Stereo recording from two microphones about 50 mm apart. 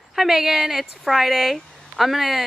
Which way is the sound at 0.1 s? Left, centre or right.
Centre.